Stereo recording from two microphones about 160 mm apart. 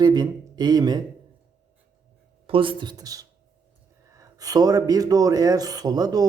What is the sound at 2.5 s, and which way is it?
Speech, 35° right (ahead or behind).